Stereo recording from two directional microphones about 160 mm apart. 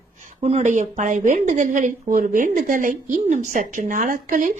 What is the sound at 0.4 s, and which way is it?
A woman's voice, 45° right (ahead or behind).